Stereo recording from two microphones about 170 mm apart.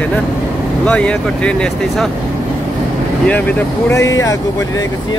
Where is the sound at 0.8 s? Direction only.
5° left (ahead or behind).